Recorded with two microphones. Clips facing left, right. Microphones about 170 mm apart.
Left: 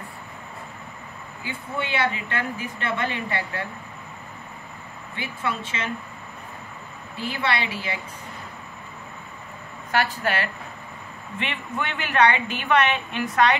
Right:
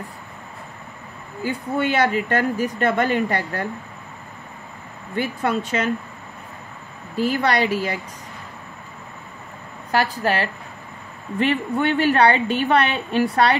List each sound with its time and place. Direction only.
1.4 s a woman's voice: 45° right (ahead or behind)
5.1 s a woman's voice: 45° right (ahead or behind)
7.2 s a woman's voice: 45° right (ahead or behind)
9.8 s a woman's voice: 40° right (ahead or behind)